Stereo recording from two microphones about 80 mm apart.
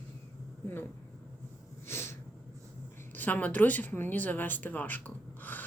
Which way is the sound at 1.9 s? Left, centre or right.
Left.